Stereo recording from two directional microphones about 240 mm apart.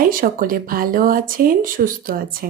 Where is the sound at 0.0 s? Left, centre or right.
Right.